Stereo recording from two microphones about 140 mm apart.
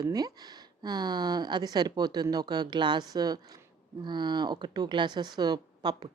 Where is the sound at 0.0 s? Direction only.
25° right (ahead or behind).